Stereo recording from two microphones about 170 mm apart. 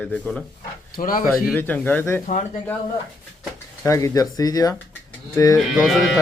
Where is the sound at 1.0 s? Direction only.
55° left (ahead or behind).